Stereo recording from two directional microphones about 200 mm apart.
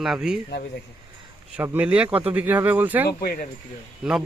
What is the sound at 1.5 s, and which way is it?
Speech, 10° right (ahead or behind).